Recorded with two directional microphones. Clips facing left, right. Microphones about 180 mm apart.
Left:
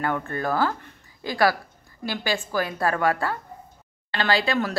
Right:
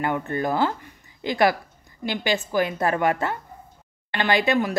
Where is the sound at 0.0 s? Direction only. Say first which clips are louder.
Right 2 dB; 20° right (ahead or behind).